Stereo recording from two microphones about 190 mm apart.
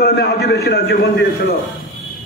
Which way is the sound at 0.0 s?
60° left (ahead or behind).